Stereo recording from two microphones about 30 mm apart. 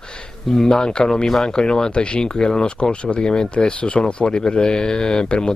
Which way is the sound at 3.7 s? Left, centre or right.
Left.